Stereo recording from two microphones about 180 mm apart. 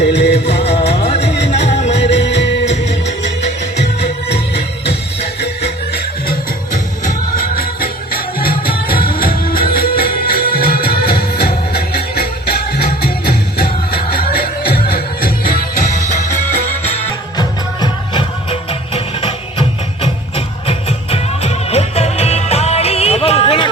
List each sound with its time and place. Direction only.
0.0 s music: 70° left (ahead or behind)
0.8 s music: 35° left (ahead or behind)
2.0 s music: 75° left (ahead or behind)
4.0 s music: 65° left (ahead or behind)
7.0 s music: 50° left (ahead or behind)
13.6 s music: 55° left (ahead or behind)
17.3 s music: 25° left (ahead or behind)